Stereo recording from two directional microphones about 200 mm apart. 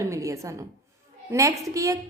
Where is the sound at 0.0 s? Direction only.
15° right (ahead or behind).